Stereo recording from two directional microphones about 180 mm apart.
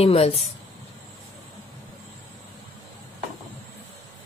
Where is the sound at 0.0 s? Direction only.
30° left (ahead or behind).